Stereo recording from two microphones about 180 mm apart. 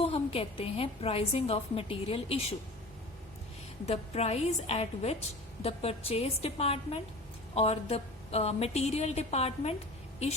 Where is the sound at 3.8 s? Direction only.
35° left (ahead or behind).